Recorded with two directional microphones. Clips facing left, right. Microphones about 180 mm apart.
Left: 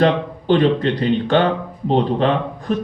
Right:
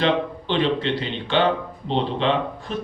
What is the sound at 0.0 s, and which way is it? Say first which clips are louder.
A man's voice: left 5 dB; 45° left (ahead or behind).